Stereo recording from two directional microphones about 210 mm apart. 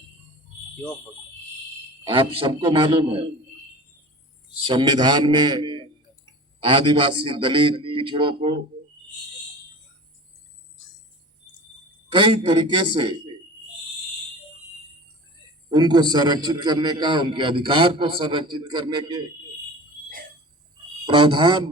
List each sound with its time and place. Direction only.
2.0 s a man's voice: 25° right (ahead or behind)
4.6 s a man's voice: 25° right (ahead or behind)
12.1 s a man's voice: 20° right (ahead or behind)
15.7 s a man's voice: 20° right (ahead or behind)
21.1 s a man's voice: 25° right (ahead or behind)